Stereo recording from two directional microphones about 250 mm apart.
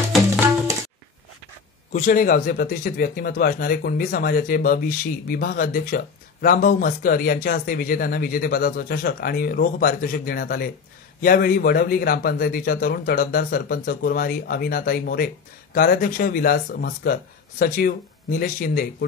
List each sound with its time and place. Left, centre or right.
0.1 s music: centre
1.9 s speech: left